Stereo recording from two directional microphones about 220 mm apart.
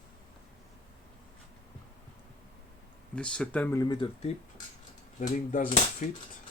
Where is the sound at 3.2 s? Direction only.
5° left (ahead or behind); by 4.3 s 20° left (ahead or behind).